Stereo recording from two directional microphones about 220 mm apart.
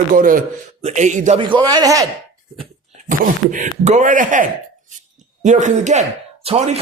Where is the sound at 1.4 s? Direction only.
20° right (ahead or behind).